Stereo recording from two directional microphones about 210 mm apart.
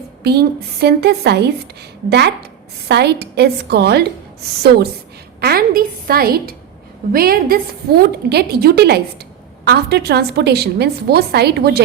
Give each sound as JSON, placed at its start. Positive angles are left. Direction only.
{"t": 0.2, "sound": "a woman's voice", "side_deg": -50}
{"t": 5.4, "sound": "a woman's voice", "side_deg": -45}